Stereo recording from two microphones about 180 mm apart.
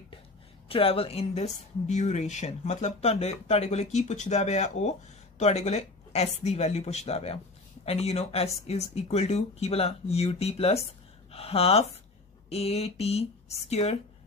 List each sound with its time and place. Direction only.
0.7 s speech: 30° left (ahead or behind)